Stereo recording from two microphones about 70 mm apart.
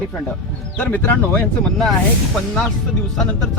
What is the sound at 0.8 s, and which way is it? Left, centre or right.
Music, left.